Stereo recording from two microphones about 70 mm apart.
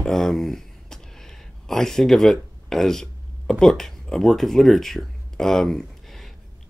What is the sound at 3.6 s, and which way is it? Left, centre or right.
Speech, centre.